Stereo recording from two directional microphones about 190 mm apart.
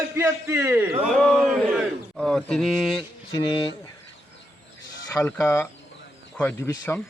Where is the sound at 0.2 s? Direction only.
10° right (ahead or behind).